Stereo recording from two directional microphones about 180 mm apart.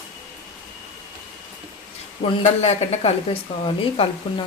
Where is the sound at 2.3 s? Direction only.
35° left (ahead or behind).